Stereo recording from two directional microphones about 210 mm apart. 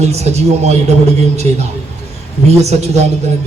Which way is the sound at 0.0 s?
30° right (ahead or behind).